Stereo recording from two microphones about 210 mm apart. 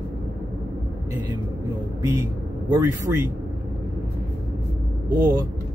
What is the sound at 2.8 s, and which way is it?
Speech, 15° right (ahead or behind).